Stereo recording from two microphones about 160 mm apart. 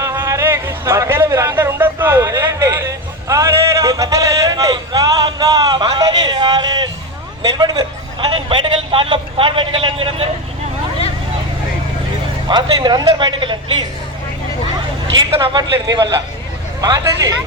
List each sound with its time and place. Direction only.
0.0 s a man's voice: 20° right (ahead or behind); by 10.2 s 35° right (ahead or behind)
12.5 s speech: 30° right (ahead or behind)
15.1 s speech: 25° right (ahead or behind)